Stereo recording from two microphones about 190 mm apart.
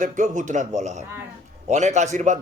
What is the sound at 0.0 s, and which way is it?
A man's voice, 40° right (ahead or behind).